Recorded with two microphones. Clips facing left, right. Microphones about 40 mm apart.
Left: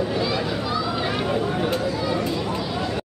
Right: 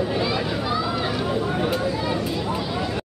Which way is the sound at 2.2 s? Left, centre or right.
Centre.